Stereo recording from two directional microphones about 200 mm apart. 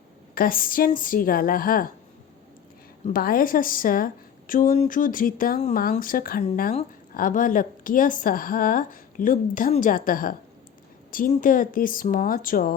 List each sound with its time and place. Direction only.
0.3 s a woman's voice: 45° left (ahead or behind)
3.1 s a woman's voice: 45° left (ahead or behind)